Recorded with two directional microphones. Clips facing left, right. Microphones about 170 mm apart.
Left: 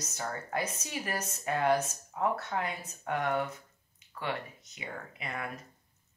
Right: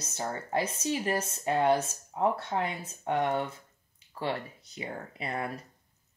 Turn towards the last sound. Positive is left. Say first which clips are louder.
# right 5 dB
turn(degrees=-30)  # may be behind; listen again after turning